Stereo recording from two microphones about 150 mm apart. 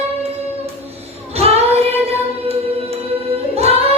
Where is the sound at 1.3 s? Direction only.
45° right (ahead or behind).